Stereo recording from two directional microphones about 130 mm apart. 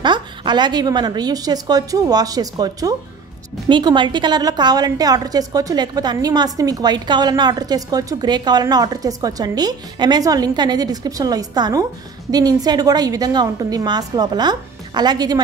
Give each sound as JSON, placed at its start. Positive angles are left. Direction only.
{"t": 0.0, "sound": "a woman's voice", "side_deg": -35}